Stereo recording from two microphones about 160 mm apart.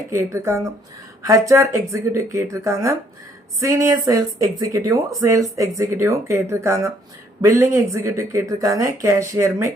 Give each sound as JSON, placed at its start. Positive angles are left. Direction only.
{"t": 0.1, "sound": "speech", "side_deg": -15}